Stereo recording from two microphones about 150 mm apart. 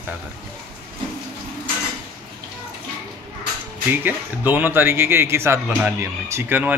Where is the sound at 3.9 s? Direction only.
10° right (ahead or behind).